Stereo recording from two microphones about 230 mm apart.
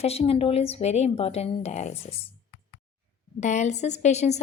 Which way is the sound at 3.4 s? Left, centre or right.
Left.